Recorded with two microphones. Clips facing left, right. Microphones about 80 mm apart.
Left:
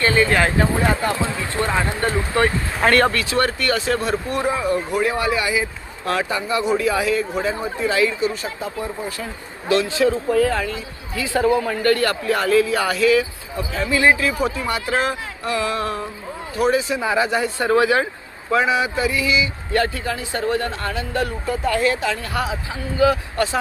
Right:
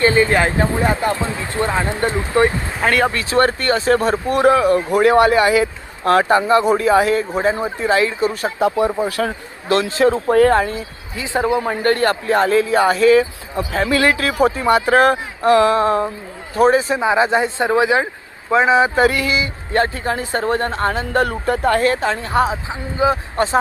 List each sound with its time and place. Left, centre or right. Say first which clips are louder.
0.0 s speech: right 3 dB; right
2.8 s speech: even; centre
3.1 s speech: right 4 dB; right
4.4 s speech: right 11 dB; right
4.7 s speech: right 7 dB; right
9.9 s speech: right 4 dB; right
10.6 s speech: right 5 dB; right
11.2 s speech: even; right
13.8 s speech: even; right
17.0 s speech: right 4 dB; right
18.9 s speech: right 4 dB; right
19.7 s speech: right 3 dB; right